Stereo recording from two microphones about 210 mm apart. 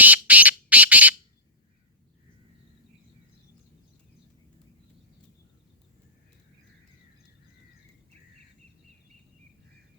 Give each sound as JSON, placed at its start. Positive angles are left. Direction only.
{"t": 0.0, "sound": "squawk", "side_deg": -5}